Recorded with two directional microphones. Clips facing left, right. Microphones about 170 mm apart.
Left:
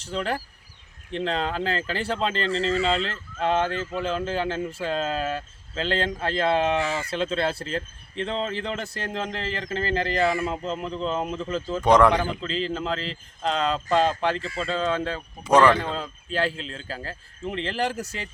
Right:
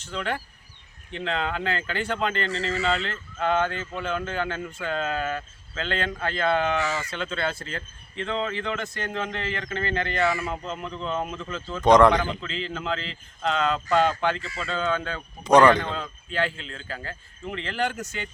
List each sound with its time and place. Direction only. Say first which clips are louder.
0.0 s speech: left 2 dB; 35° left (ahead or behind)
11.8 s a man's voice: right 2 dB; 5° left (ahead or behind)
12.4 s speech: left 4 dB; 35° left (ahead or behind)
15.4 s a man's voice: right 1 dB; 5° left (ahead or behind)
16.0 s speech: left 1 dB; 35° left (ahead or behind)